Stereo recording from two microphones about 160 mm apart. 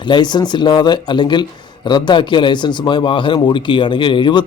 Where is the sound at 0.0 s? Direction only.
30° left (ahead or behind).